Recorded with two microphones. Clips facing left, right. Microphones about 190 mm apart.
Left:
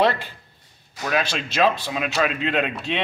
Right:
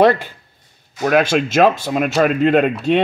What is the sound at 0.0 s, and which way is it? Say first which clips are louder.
Speech: right 7 dB; 50° right (ahead or behind).